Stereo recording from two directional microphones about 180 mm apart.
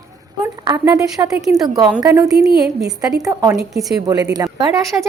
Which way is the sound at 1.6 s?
20° right (ahead or behind).